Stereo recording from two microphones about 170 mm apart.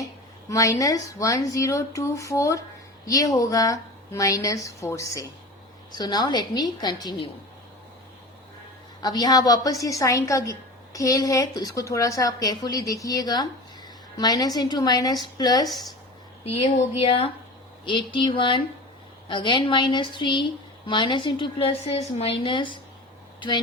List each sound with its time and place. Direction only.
0.0 s a woman's voice: 20° left (ahead or behind)
9.0 s a woman's voice: 25° left (ahead or behind)
17.1 s a woman's voice: 35° left (ahead or behind)